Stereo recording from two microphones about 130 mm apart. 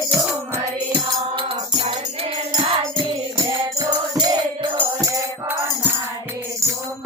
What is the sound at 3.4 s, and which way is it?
Music, 30° right (ahead or behind).